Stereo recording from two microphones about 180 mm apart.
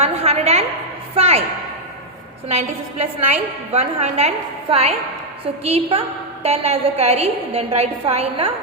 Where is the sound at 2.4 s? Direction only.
35° right (ahead or behind).